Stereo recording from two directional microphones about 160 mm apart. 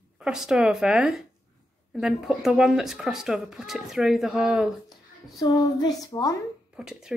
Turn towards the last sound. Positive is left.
turn(degrees=-5)  # may be behind; listen again after turning